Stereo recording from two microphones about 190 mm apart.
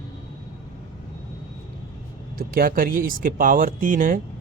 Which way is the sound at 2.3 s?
50° right (ahead or behind).